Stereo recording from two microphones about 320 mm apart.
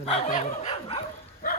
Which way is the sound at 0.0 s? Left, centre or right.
Centre.